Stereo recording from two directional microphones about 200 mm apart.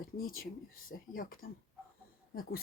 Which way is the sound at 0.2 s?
45° left (ahead or behind).